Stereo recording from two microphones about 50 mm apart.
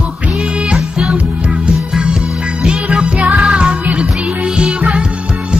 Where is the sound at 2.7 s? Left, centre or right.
Centre.